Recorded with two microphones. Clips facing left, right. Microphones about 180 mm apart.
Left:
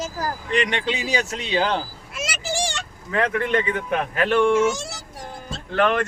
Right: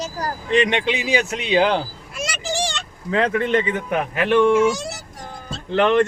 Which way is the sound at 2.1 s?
5° left (ahead or behind).